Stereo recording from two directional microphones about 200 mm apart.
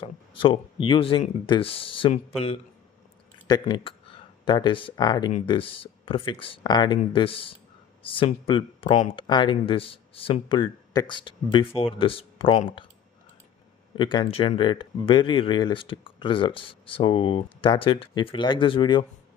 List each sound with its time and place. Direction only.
0.0 s speech: 25° left (ahead or behind)
13.9 s speech: 25° left (ahead or behind)